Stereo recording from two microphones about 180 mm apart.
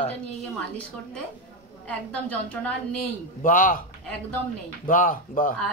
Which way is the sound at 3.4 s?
50° left (ahead or behind).